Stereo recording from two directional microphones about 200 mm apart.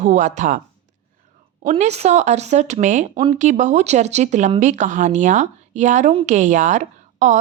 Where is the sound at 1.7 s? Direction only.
30° right (ahead or behind).